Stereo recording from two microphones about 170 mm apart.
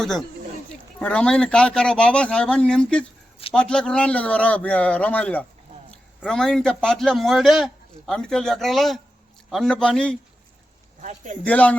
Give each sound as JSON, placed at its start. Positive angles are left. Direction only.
{"t": 0.9, "sound": "a man's voice", "side_deg": 5}
{"t": 11.0, "sound": "speech", "side_deg": -45}
{"t": 11.4, "sound": "speech", "side_deg": 10}